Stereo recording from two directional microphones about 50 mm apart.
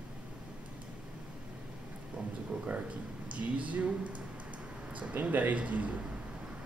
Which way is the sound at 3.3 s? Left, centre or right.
Right.